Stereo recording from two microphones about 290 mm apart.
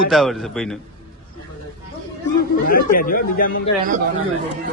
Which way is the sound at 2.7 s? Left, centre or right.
Left.